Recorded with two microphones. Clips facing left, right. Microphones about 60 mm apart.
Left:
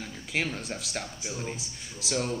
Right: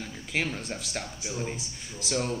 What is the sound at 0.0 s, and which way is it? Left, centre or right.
Speech, centre.